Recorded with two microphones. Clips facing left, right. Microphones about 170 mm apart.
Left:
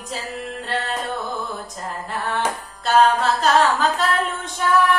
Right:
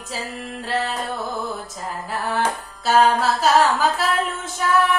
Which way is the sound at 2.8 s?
5° right (ahead or behind).